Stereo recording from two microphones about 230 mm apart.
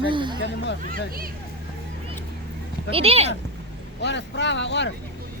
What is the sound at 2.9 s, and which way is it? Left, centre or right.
Speech, right.